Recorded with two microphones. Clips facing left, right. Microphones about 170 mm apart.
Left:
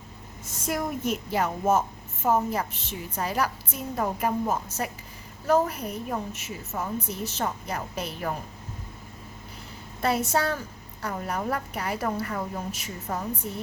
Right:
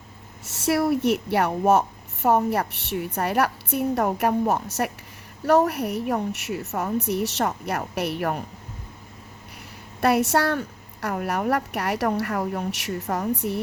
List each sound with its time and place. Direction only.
0.4 s a woman's voice: 70° right (ahead or behind)
10.0 s a woman's voice: 70° right (ahead or behind)